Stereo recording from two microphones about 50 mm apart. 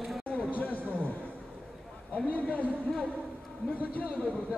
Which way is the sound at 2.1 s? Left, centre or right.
Left.